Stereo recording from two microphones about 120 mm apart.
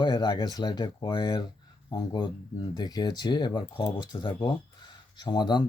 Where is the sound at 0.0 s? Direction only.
35° left (ahead or behind).